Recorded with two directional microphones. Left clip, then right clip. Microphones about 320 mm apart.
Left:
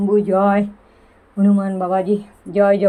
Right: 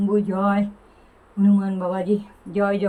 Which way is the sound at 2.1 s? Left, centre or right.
Centre.